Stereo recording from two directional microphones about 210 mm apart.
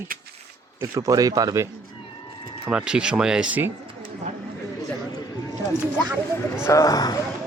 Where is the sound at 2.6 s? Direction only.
5° right (ahead or behind).